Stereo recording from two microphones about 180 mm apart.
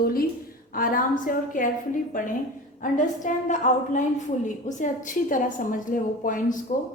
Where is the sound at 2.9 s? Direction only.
45° left (ahead or behind).